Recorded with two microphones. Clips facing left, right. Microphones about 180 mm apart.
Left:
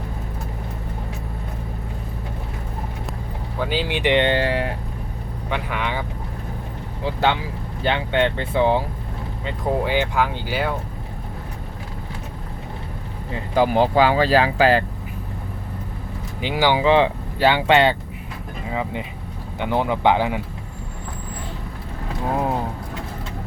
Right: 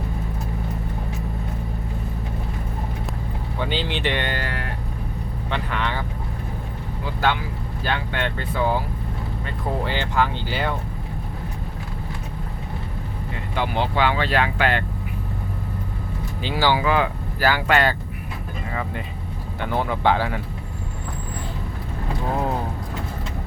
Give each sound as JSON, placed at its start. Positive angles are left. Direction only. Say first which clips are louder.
{"t": 3.6, "sound": "speech", "louder": "left 3 dB", "side_deg": 10}
{"t": 5.5, "sound": "speech", "louder": "left 1 dB", "side_deg": 10}
{"t": 7.0, "sound": "speech", "louder": "left 2 dB", "side_deg": 25}
{"t": 9.5, "sound": "speech", "louder": "left 5 dB", "side_deg": 10}
{"t": 13.5, "sound": "speech", "louder": "left 7 dB", "side_deg": 40}
{"t": 16.4, "sound": "speech", "louder": "left 2 dB", "side_deg": 15}